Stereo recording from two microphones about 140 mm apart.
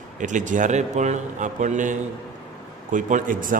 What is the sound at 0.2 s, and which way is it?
A man's voice, 65° right (ahead or behind).